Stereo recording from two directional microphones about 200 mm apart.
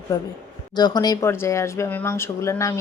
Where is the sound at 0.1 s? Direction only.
20° left (ahead or behind).